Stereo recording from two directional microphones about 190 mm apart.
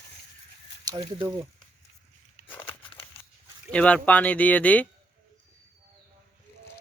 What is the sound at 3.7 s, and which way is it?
Speech, 5° left (ahead or behind).